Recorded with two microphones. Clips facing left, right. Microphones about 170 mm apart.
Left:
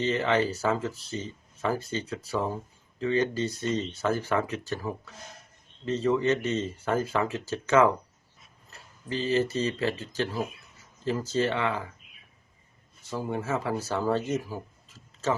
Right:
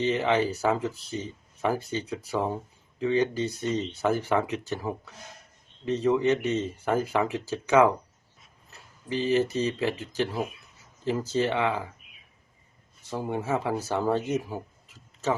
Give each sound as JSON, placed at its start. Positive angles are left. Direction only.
{"t": 0.0, "sound": "speech", "side_deg": -15}
{"t": 9.0, "sound": "speech", "side_deg": -15}
{"t": 13.1, "sound": "speech", "side_deg": -20}